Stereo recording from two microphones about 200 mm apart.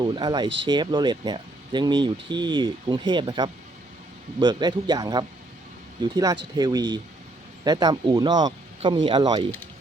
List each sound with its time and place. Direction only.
0.0 s speech: 20° right (ahead or behind)